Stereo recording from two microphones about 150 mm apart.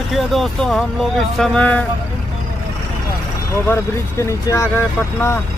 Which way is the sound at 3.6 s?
20° left (ahead or behind).